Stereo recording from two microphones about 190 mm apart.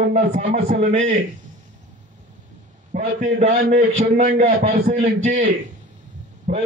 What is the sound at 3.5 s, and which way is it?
A man's voice, 45° right (ahead or behind).